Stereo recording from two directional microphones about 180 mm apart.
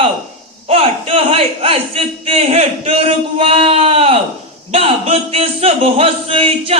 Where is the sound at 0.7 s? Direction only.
30° right (ahead or behind).